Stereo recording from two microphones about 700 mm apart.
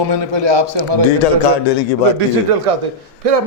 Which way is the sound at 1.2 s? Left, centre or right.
Left.